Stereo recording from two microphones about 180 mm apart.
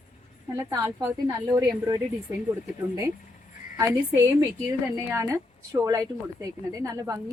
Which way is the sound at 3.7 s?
15° right (ahead or behind).